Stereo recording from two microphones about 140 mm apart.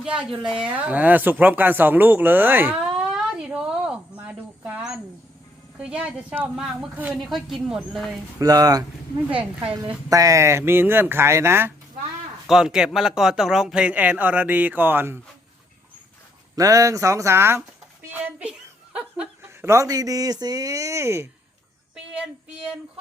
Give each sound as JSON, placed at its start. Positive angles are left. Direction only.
{"t": 0.0, "sound": "speech", "side_deg": -5}
{"t": 3.0, "sound": "a sound", "side_deg": -5}
{"t": 5.7, "sound": "speech", "side_deg": -10}
{"t": 8.4, "sound": "speech", "side_deg": -25}
{"t": 9.4, "sound": "a woman's voice", "side_deg": -35}
{"t": 10.1, "sound": "speech", "side_deg": -25}
{"t": 12.5, "sound": "speech", "side_deg": -5}
{"t": 16.6, "sound": "speech", "side_deg": -25}
{"t": 18.9, "sound": "laughter", "side_deg": -5}
{"t": 19.6, "sound": "speech", "side_deg": -25}